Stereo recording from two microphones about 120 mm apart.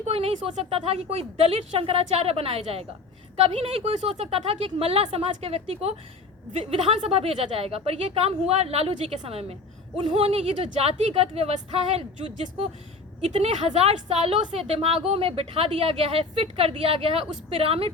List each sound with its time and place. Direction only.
0.0 s speech: 60° right (ahead or behind)